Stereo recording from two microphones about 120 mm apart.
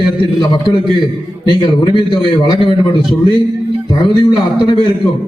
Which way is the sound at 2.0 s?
40° left (ahead or behind).